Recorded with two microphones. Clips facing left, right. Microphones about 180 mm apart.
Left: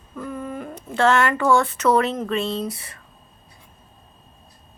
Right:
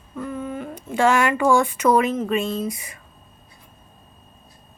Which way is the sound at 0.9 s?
10° right (ahead or behind).